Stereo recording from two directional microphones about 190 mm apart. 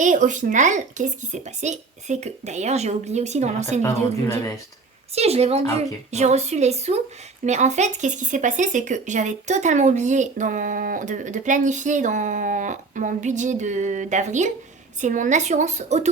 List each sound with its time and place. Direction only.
0.0 s speech: 40° right (ahead or behind)
5.1 s speech: 35° right (ahead or behind)